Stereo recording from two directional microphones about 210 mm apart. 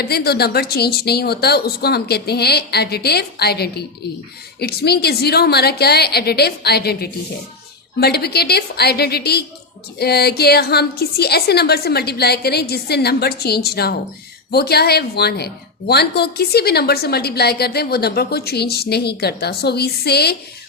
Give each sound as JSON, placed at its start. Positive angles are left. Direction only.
{"t": 0.0, "sound": "a woman's voice", "side_deg": 50}